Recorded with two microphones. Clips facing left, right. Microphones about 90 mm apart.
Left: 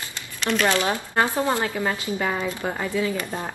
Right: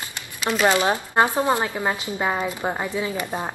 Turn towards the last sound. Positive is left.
turn(degrees=-20)  # may be behind; listen again after turning